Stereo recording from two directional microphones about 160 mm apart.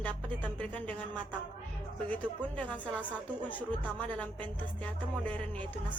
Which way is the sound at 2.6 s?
10° left (ahead or behind).